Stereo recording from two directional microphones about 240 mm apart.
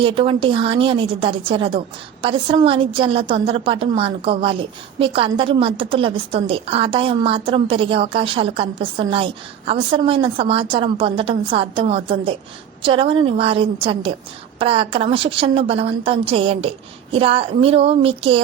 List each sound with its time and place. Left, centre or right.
0.0 s a woman's voice: right